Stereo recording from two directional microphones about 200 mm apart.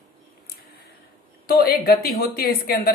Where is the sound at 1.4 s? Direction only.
50° left (ahead or behind).